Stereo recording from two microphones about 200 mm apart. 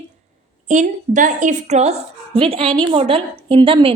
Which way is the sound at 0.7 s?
40° right (ahead or behind).